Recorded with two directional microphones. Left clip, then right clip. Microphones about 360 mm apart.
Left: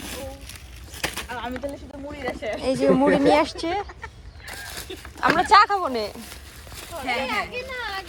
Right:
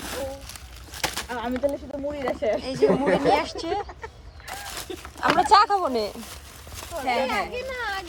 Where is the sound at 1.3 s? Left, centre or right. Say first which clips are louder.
Right 1 dB; right.